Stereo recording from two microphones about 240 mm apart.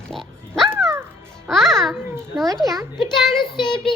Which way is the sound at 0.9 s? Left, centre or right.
Centre.